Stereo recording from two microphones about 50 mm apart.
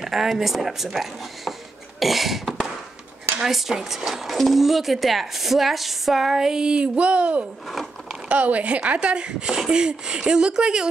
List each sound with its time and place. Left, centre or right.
0.0 s speech: centre